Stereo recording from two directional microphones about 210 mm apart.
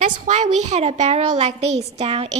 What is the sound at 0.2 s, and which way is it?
A woman's voice, 35° right (ahead or behind).